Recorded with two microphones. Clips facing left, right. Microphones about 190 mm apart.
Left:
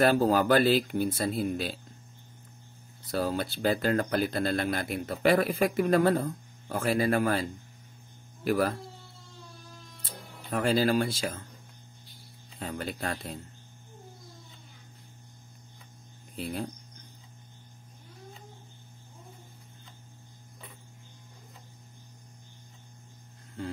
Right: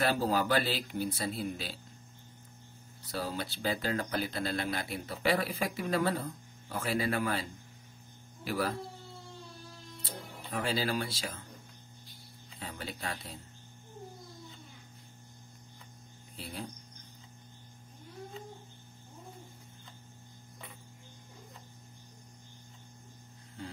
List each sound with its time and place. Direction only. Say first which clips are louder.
0.0 s speech: left 7 dB; 50° left (ahead or behind)
3.1 s speech: left 7 dB; 50° left (ahead or behind)
8.5 s speech: left 7 dB; 50° left (ahead or behind)
10.5 s speech: left 7 dB; 50° left (ahead or behind)
12.5 s speech: left 7 dB; 50° left (ahead or behind)